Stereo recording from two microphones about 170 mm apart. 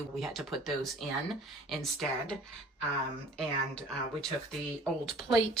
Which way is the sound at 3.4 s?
5° left (ahead or behind).